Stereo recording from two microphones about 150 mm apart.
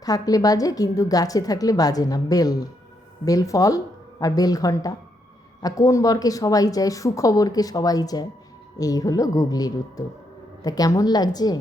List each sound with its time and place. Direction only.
0.0 s a woman's voice: 25° left (ahead or behind)